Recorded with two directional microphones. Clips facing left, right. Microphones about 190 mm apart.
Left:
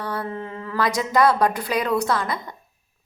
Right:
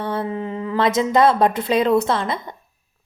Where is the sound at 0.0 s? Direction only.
25° right (ahead or behind).